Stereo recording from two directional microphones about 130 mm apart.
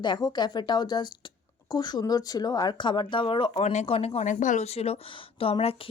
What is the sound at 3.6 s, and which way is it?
A woman's voice, 60° left (ahead or behind).